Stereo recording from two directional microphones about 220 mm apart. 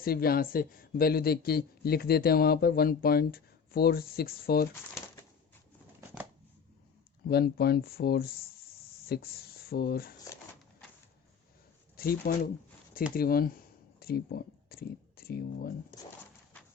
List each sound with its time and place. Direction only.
0.0 s a man's voice: 45° left (ahead or behind)
7.3 s speech: 45° left (ahead or behind)
11.9 s a man's voice: 40° left (ahead or behind)